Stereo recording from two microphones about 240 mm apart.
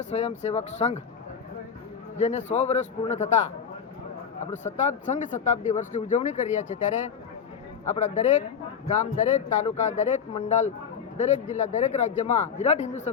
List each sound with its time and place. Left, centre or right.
0.0 s speech: left
2.1 s speech: left
4.5 s speech: left
7.9 s speech: left